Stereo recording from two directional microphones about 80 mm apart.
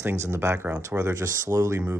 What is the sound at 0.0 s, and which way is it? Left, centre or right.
Speech, right.